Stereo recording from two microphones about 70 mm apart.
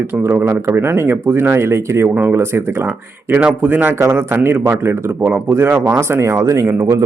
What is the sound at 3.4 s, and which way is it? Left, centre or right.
A man's voice, right.